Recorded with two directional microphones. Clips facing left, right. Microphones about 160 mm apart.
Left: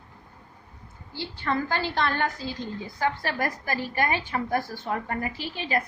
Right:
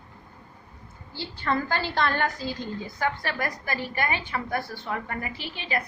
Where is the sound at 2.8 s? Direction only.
35° left (ahead or behind).